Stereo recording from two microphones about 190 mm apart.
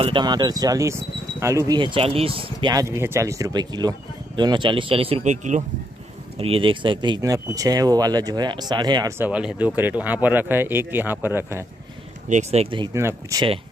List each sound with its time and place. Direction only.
0.0 s speech: 25° right (ahead or behind)
9.2 s speech: 5° right (ahead or behind)
12.3 s speech: 35° right (ahead or behind)
12.9 s speech: 15° right (ahead or behind)